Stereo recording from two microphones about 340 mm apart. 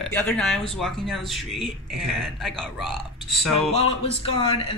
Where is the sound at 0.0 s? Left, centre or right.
Centre.